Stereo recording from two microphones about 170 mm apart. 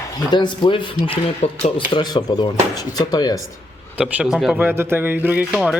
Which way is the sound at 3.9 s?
10° right (ahead or behind).